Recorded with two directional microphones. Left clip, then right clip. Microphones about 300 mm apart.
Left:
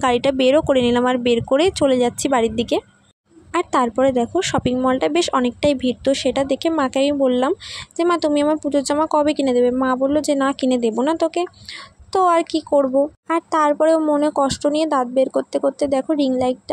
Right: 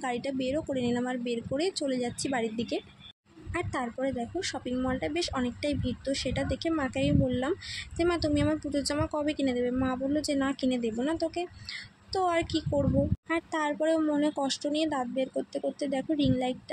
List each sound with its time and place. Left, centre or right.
0.0 s speech: left